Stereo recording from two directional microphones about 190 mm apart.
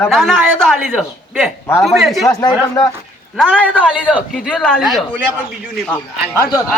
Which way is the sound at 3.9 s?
5° right (ahead or behind).